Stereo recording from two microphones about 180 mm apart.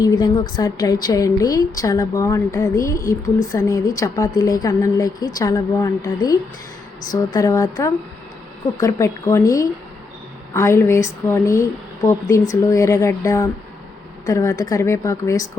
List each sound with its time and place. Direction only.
0.0 s a woman's voice: 25° left (ahead or behind)